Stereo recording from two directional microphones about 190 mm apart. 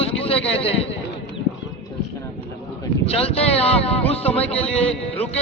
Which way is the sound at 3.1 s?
30° left (ahead or behind).